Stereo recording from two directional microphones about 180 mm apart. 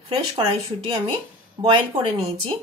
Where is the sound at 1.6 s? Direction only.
30° right (ahead or behind).